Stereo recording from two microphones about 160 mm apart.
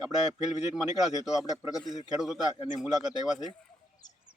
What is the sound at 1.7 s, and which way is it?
Speech, centre (ahead or behind).